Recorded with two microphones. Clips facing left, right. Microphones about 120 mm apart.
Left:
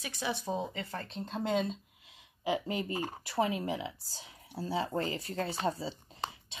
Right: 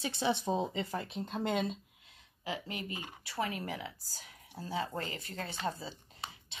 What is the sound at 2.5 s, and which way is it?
Speech, 25° left (ahead or behind).